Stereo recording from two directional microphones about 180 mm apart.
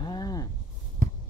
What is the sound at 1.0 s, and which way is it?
Heart sounds, 50° right (ahead or behind).